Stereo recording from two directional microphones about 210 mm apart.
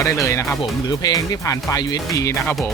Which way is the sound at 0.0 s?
15° left (ahead or behind).